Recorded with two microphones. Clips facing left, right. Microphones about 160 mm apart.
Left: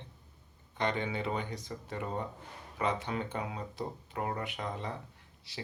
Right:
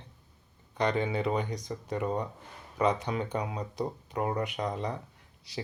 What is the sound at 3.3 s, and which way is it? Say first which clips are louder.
Speech: right 4 dB; 40° right (ahead or behind).